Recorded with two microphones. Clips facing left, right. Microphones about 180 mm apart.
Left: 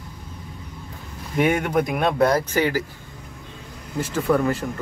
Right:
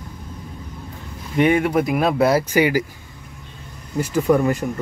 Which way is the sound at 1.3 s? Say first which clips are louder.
Right 3 dB; centre (ahead or behind).